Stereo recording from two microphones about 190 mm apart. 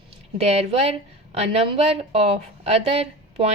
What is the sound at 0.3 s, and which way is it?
A woman's voice, 35° right (ahead or behind).